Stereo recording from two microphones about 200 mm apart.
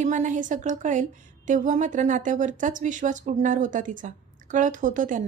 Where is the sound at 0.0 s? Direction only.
40° right (ahead or behind).